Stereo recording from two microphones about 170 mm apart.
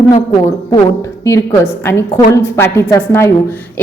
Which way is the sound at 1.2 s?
15° left (ahead or behind).